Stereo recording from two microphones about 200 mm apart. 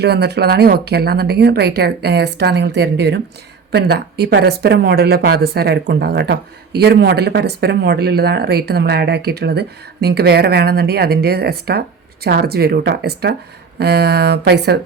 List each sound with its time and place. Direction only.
0.0 s a woman's voice: 55° right (ahead or behind)